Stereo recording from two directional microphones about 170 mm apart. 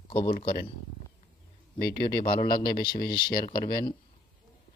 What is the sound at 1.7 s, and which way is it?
Speech, 65° left (ahead or behind).